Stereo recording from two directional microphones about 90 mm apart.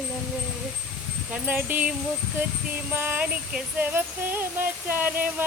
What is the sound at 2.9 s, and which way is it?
Speech, 20° right (ahead or behind).